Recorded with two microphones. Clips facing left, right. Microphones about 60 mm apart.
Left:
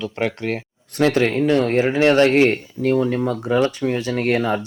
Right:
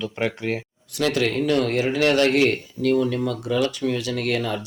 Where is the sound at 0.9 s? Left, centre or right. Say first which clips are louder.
Left 5 dB; left.